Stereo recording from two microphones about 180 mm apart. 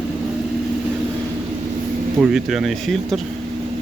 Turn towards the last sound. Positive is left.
turn(degrees=0)  # may be behind; listen again after turning